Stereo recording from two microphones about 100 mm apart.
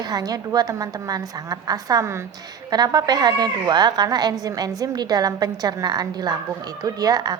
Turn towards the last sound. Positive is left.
turn(degrees=-40)  # may be behind; listen again after turning